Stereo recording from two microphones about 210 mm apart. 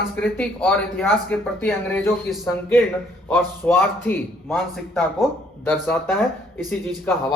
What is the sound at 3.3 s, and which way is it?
A man's voice, 10° left (ahead or behind).